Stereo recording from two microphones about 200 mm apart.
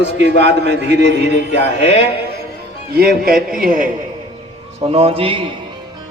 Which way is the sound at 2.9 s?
50° right (ahead or behind).